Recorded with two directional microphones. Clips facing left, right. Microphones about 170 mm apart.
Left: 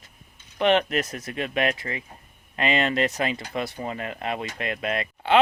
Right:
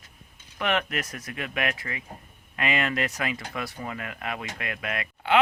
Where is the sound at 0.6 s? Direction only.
25° left (ahead or behind).